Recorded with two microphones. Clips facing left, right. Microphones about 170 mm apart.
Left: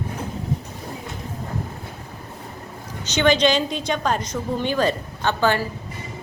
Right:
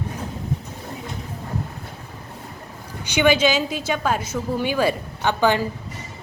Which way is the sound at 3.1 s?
10° right (ahead or behind).